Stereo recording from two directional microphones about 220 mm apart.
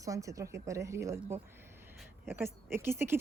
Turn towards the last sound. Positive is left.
turn(degrees=-10)  # may be behind; listen again after turning